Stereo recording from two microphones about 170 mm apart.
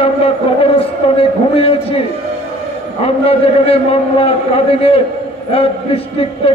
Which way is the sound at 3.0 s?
35° left (ahead or behind).